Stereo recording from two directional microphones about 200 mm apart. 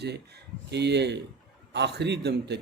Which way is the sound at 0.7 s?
60° right (ahead or behind).